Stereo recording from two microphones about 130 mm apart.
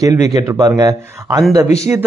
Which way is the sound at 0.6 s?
30° right (ahead or behind).